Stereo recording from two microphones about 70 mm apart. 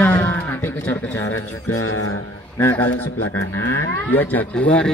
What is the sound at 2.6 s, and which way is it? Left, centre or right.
Speech, left.